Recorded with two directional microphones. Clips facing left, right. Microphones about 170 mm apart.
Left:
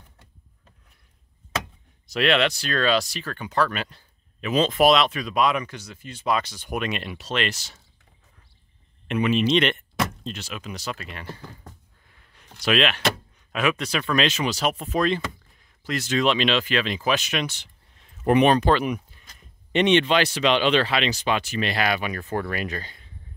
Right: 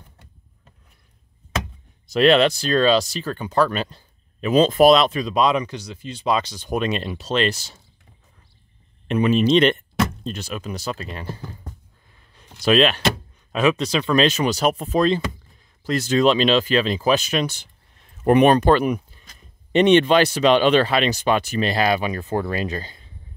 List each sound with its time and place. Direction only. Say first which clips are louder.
2.1 s speech: right 6 dB; 35° right (ahead or behind)
9.0 s speech: right 4 dB; 35° right (ahead or behind)
18.2 s speech: right 4 dB; 45° right (ahead or behind)